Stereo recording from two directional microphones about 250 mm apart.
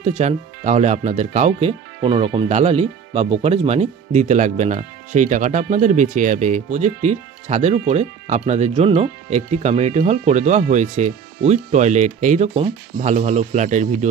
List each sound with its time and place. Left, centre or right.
0.0 s speech: right